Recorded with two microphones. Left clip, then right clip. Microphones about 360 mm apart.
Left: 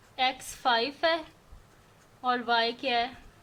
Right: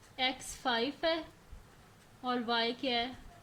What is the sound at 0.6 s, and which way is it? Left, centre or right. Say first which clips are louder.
Speech: left 7 dB; left.